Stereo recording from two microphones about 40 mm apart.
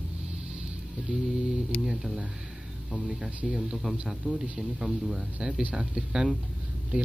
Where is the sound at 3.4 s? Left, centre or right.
Centre.